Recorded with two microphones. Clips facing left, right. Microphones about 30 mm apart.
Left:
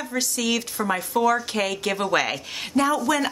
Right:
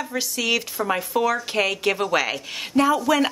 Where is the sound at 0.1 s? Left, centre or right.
Centre.